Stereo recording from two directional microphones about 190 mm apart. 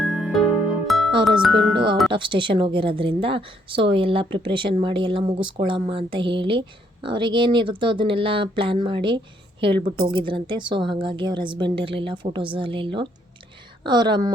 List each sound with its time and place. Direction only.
0.0 s music: 5° right (ahead or behind)
1.4 s speech: 5° right (ahead or behind)
1.7 s a woman's voice: 25° right (ahead or behind)